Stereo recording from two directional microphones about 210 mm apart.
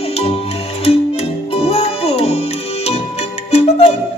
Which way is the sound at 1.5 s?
30° left (ahead or behind).